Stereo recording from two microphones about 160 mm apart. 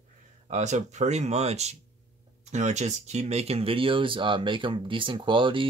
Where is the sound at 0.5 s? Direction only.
50° right (ahead or behind).